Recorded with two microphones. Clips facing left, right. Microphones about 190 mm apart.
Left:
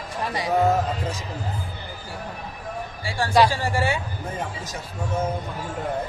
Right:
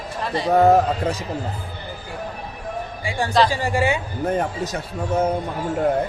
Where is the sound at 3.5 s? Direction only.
15° right (ahead or behind).